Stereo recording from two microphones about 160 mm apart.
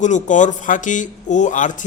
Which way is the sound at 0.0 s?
50° left (ahead or behind).